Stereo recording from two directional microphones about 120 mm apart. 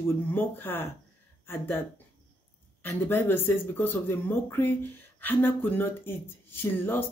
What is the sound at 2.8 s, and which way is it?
Speech, 20° left (ahead or behind).